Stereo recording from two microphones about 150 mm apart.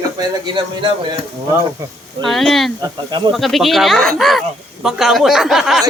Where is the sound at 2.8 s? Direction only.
30° right (ahead or behind).